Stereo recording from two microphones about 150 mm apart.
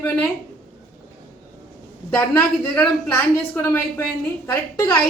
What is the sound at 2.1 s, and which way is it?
A woman's voice, 15° left (ahead or behind).